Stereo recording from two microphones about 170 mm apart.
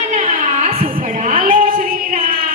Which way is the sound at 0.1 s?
45° right (ahead or behind).